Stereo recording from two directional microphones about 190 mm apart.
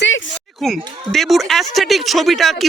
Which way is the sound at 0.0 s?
80° left.